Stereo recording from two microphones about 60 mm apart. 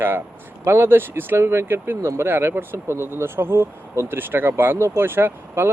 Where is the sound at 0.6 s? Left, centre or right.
Right.